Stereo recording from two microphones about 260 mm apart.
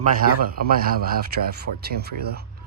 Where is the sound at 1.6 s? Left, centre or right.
Right.